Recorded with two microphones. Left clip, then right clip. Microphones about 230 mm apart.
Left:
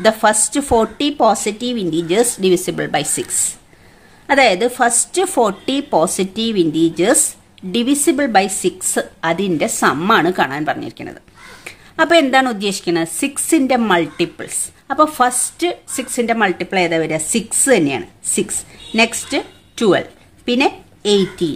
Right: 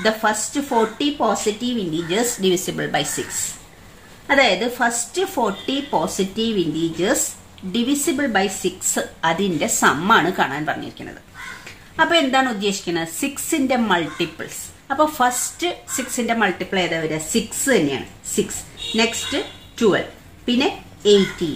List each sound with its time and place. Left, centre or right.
0.0 s a woman's voice: left